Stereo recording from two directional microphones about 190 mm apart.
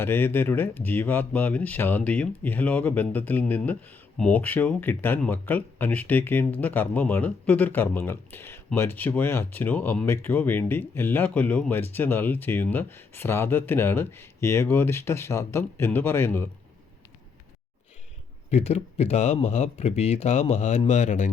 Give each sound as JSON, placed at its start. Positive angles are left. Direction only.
{"t": 0.0, "sound": "speech", "side_deg": 10}
{"t": 18.5, "sound": "speech", "side_deg": 35}